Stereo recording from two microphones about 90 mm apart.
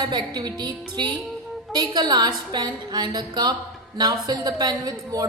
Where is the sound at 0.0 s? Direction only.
50° right (ahead or behind).